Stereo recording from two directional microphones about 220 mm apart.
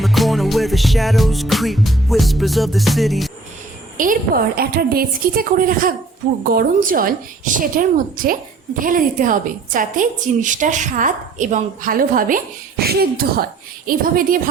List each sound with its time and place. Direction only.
0.0 s music: centre (ahead or behind)
3.9 s a woman's voice: 35° right (ahead or behind)